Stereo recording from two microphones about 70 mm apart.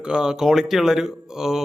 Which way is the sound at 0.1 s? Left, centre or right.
Centre.